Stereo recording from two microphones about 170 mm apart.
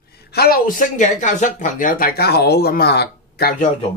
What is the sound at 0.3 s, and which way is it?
Speech, 65° left (ahead or behind).